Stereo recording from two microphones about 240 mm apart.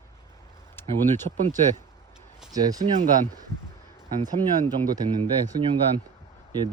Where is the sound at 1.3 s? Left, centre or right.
Right.